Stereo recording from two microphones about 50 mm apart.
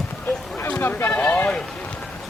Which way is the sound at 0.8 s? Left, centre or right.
Left.